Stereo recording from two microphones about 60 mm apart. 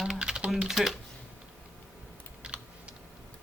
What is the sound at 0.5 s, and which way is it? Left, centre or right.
Speech, centre.